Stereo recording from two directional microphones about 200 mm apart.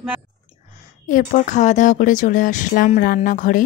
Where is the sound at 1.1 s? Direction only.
40° left (ahead or behind).